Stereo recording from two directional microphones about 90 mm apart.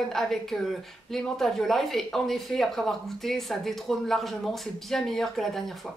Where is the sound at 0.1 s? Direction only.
5° left (ahead or behind).